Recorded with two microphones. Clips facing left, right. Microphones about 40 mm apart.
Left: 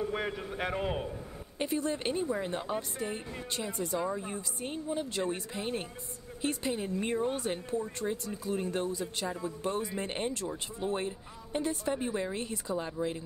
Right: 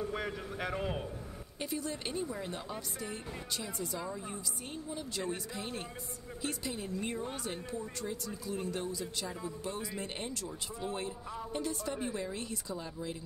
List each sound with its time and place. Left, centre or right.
0.0 s a man's voice: centre
1.6 s a woman's voice: left